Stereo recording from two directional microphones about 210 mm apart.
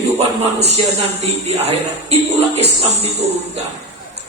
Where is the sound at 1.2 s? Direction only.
30° right (ahead or behind).